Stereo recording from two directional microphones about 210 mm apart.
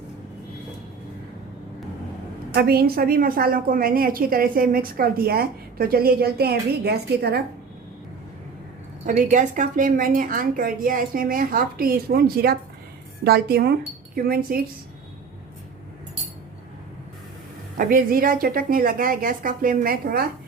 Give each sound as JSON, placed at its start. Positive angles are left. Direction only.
{"t": 2.5, "sound": "a woman's voice", "side_deg": -45}
{"t": 9.0, "sound": "a woman's voice", "side_deg": -35}
{"t": 17.7, "sound": "a woman's voice", "side_deg": -40}